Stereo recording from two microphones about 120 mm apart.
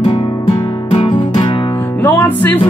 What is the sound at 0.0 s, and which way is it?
Music, 45° left (ahead or behind).